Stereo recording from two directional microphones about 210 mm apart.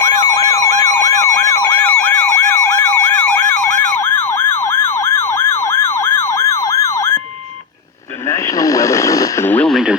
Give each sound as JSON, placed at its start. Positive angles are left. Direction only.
{"t": 0.0, "sound": "siren", "side_deg": 15}
{"t": 0.9, "sound": "emergency vehicle", "side_deg": 15}
{"t": 8.3, "sound": "radio", "side_deg": 15}